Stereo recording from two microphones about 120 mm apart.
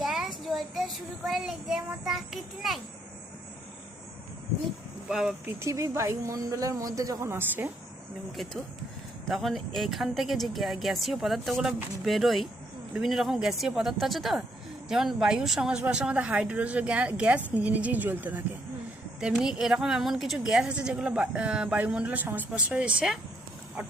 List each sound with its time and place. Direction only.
0.0 s child singing: 5° right (ahead or behind)
5.0 s speech: 5° right (ahead or behind)
5.5 s a woman's voice: 25° right (ahead or behind)
9.2 s a woman's voice: centre (ahead or behind)